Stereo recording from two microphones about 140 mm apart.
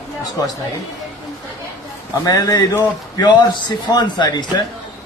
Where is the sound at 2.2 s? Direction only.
25° left (ahead or behind).